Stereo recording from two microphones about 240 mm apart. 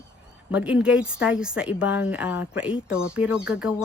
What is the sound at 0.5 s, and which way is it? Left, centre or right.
Speech, centre.